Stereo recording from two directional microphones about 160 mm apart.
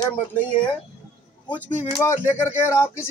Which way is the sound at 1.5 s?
10° left (ahead or behind).